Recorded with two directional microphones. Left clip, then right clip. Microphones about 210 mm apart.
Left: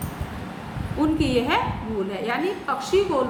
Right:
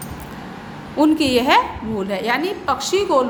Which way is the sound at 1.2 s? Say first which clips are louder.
Right 6 dB; 45° right (ahead or behind).